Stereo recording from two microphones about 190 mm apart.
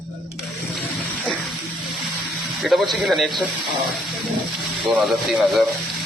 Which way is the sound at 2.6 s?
Centre (ahead or behind).